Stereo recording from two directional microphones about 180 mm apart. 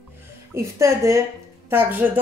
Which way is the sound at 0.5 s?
15° right (ahead or behind).